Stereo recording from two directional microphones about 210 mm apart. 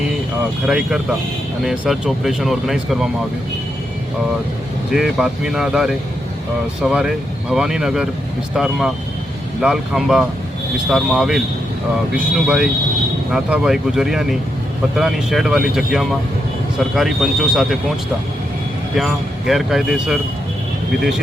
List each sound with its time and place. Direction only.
0.7 s speech: centre (ahead or behind)
4.9 s speech: centre (ahead or behind)
18.9 s speech: centre (ahead or behind)